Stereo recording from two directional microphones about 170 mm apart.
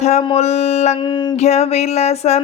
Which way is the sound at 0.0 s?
40° left (ahead or behind).